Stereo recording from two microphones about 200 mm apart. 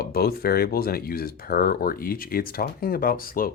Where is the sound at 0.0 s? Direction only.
50° left (ahead or behind).